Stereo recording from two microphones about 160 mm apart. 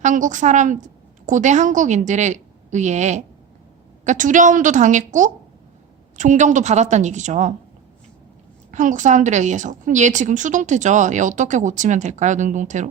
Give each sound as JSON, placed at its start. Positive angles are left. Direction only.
{"t": 0.0, "sound": "a woman's voice", "side_deg": -50}
{"t": 8.7, "sound": "a woman's voice", "side_deg": -50}